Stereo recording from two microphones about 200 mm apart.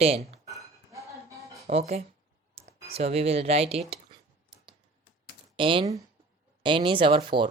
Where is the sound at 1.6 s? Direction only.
35° right (ahead or behind).